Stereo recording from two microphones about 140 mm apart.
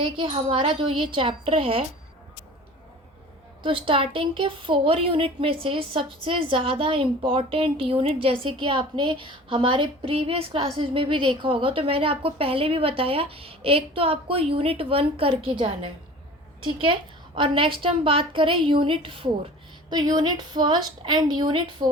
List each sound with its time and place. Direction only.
0.0 s a woman's voice: 35° right (ahead or behind)
3.6 s a woman's voice: 40° right (ahead or behind)
19.9 s a woman's voice: 30° right (ahead or behind)